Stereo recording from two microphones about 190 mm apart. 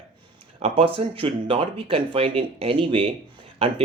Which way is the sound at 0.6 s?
30° right (ahead or behind).